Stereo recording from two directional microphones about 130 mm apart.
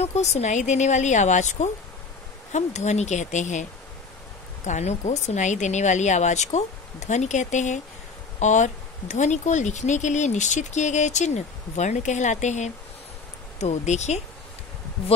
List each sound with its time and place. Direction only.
0.0 s speech: 60° left (ahead or behind)
4.6 s speech: 65° left (ahead or behind)